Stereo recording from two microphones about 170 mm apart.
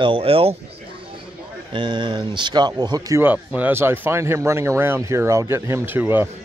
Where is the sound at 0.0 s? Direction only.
30° right (ahead or behind).